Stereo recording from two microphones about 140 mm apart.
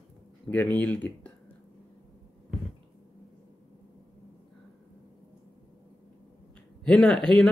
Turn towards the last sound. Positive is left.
turn(degrees=5)  # may be behind; listen again after turning